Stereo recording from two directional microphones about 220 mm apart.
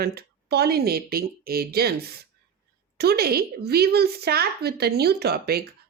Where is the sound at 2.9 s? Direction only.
45° right (ahead or behind).